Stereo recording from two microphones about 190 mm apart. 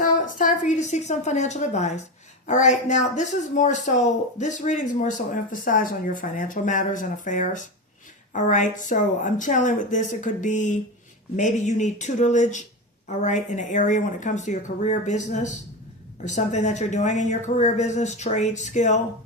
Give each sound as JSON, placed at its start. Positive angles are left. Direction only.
{"t": 0.0, "sound": "a woman's voice", "side_deg": 45}